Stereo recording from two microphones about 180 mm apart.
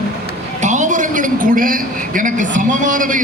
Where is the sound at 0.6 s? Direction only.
40° right (ahead or behind).